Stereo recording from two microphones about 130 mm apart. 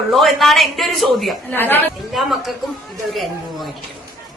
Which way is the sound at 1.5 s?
15° left (ahead or behind).